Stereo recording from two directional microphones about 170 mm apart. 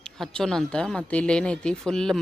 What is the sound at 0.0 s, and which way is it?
Speech, 5° left (ahead or behind).